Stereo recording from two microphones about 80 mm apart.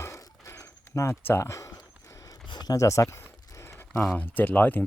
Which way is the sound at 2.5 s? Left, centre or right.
Left.